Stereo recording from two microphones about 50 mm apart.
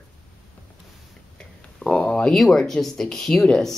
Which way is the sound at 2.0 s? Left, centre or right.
Left.